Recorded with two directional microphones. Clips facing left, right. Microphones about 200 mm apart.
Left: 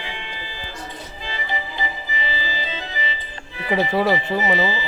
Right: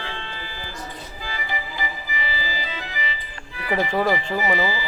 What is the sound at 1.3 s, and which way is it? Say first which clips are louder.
Organ: left 2 dB; 25° left (ahead or behind).